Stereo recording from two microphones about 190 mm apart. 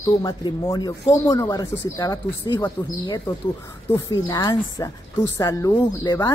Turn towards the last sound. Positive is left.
turn(degrees=20)  # may be behind; listen again after turning